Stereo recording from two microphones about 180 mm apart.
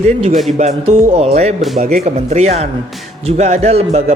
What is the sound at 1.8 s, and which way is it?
Speech, 40° right (ahead or behind).